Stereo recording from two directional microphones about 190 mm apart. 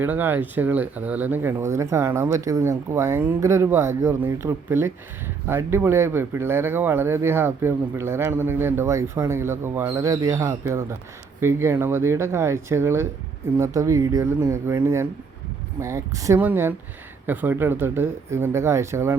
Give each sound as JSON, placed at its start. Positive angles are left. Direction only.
{"t": 0.0, "sound": "speech", "side_deg": -10}